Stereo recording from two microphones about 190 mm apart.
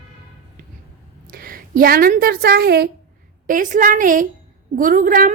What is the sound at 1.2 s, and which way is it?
A woman's voice, 50° right (ahead or behind).